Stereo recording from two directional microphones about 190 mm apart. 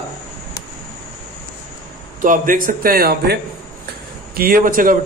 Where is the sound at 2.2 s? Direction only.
45° right (ahead or behind).